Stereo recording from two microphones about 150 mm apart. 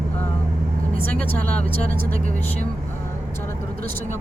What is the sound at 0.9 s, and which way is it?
Speech, 70° right (ahead or behind).